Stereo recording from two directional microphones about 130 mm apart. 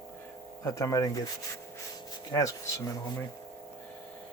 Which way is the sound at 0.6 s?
25° left (ahead or behind).